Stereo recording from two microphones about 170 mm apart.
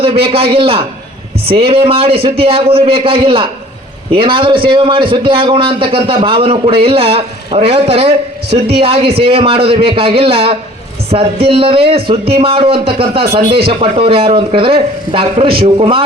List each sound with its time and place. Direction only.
0.0 s a man's voice: 35° right (ahead or behind)
8.4 s a woman's voice: 75° right (ahead or behind)
9.2 s a man's voice: 35° right (ahead or behind)